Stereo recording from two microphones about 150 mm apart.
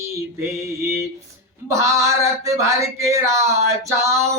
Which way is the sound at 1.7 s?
20° right (ahead or behind).